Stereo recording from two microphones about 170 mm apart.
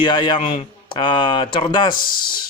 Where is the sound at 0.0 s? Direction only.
25° left (ahead or behind).